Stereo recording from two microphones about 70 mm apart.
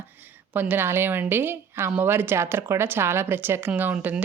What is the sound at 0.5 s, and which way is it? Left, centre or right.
A woman's voice, right.